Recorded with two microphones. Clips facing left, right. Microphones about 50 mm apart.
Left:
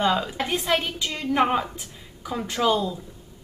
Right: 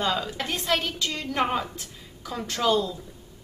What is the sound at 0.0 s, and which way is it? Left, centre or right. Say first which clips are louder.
A woman's voice: left 4 dB; centre.